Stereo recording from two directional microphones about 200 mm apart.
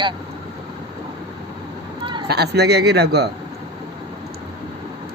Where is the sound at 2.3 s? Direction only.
55° right (ahead or behind).